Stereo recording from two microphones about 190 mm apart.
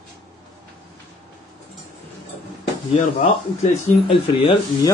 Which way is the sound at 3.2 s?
30° left (ahead or behind).